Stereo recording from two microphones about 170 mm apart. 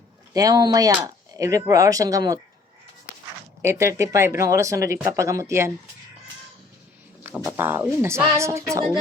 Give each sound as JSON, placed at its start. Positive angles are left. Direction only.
{"t": 0.3, "sound": "speech", "side_deg": -20}
{"t": 3.6, "sound": "speech", "side_deg": -15}
{"t": 7.5, "sound": "speech", "side_deg": -15}